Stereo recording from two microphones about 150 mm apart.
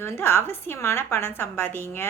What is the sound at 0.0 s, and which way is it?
A woman's voice, 15° left (ahead or behind).